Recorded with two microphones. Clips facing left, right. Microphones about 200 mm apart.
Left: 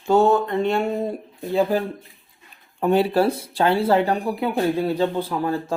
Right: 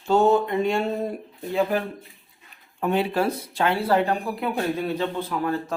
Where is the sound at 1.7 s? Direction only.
30° left (ahead or behind).